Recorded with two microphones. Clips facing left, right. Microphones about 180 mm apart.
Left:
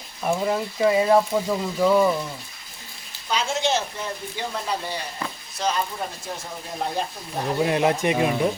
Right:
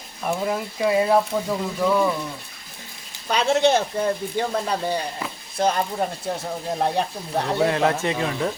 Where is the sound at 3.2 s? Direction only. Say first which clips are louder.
Right 6 dB; 65° right (ahead or behind).